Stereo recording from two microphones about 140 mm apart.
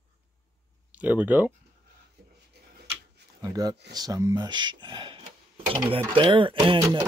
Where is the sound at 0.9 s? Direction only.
10° right (ahead or behind).